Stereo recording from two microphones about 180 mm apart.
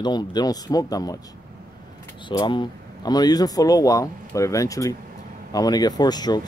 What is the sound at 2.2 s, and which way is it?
Speech, 25° left (ahead or behind).